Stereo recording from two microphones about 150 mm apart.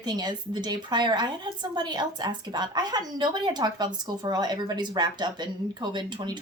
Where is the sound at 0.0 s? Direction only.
30° right (ahead or behind).